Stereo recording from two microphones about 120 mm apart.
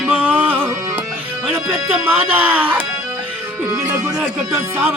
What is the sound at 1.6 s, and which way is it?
Music, 15° right (ahead or behind).